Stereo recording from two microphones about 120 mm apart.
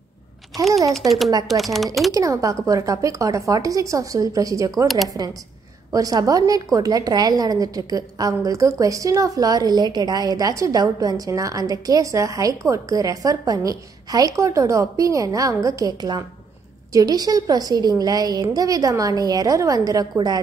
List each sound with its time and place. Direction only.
0.9 s speech: centre (ahead or behind)
2.1 s a woman's voice: 30° right (ahead or behind)
4.8 s speech: centre (ahead or behind)
5.9 s a woman's voice: 30° right (ahead or behind)